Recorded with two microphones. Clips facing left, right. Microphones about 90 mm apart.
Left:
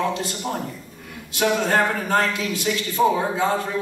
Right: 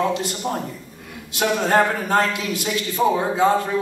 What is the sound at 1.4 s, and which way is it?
A man's voice, 20° right (ahead or behind).